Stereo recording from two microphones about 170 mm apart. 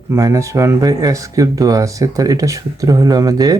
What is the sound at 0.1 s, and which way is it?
Speech, 20° right (ahead or behind).